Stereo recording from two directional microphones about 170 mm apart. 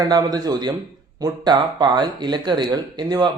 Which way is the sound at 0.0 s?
25° right (ahead or behind).